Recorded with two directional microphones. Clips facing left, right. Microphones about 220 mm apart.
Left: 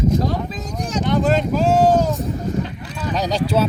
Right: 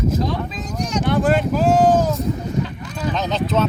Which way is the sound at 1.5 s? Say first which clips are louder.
Even; 5° right (ahead or behind).